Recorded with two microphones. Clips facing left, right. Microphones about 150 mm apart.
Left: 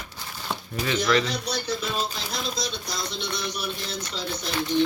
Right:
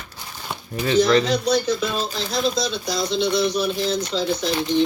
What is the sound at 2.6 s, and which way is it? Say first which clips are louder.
Speech: right 8 dB; 90° right.